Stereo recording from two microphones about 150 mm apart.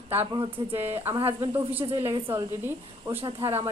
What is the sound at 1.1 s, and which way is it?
Speech, 35° right (ahead or behind).